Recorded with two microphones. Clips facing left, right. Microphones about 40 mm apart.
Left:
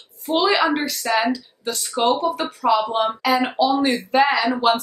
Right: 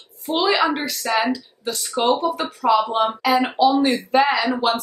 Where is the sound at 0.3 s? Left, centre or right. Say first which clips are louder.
Left 1 dB; centre.